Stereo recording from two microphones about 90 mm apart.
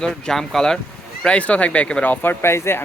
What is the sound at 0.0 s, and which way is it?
Speech, 5° left (ahead or behind).